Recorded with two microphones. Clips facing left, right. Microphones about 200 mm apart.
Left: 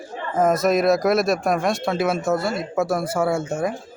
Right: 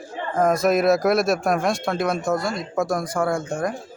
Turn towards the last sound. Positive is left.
turn(degrees=5)  # may be behind; listen again after turning